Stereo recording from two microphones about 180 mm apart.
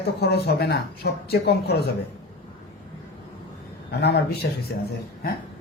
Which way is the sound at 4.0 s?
70° left (ahead or behind).